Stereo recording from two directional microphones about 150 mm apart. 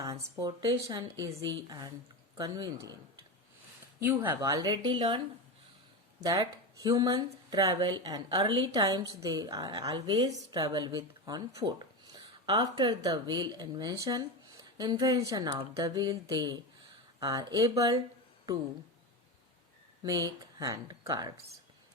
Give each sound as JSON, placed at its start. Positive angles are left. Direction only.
{"t": 0.0, "sound": "speech", "side_deg": -20}
{"t": 4.0, "sound": "speech", "side_deg": -15}
{"t": 6.2, "sound": "speech", "side_deg": -25}
{"t": 20.0, "sound": "speech", "side_deg": -25}